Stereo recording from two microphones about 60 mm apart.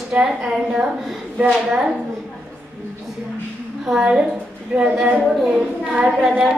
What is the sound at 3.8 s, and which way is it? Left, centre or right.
Child singing, centre.